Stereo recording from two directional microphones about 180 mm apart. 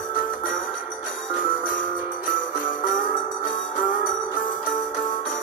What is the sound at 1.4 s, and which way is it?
Jingle bell, 50° left (ahead or behind).